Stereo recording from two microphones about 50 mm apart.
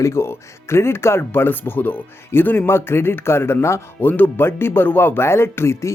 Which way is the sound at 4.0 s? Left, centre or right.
Left.